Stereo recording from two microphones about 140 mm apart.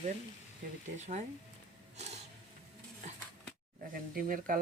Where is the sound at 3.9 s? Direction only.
90° right.